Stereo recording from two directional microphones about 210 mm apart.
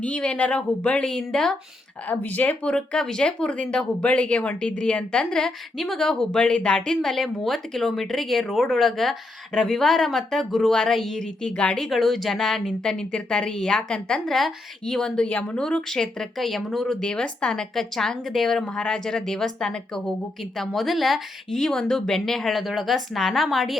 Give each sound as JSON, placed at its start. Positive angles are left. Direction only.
{"t": 0.0, "sound": "speech", "side_deg": 5}